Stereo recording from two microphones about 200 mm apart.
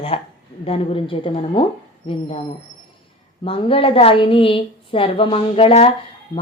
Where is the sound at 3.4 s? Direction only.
25° left (ahead or behind).